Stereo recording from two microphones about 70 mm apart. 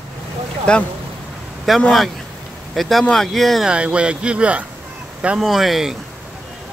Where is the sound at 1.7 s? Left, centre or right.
Centre.